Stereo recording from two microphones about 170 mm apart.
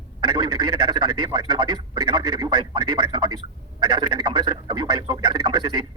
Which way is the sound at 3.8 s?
25° right (ahead or behind).